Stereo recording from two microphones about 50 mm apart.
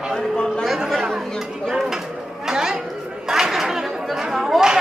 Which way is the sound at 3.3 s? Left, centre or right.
Centre.